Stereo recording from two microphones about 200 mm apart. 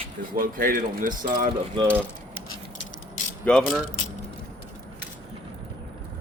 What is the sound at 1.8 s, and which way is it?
Speech, 25° right (ahead or behind).